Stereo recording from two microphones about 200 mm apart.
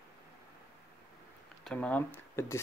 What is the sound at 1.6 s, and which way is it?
Speech, 5° left (ahead or behind).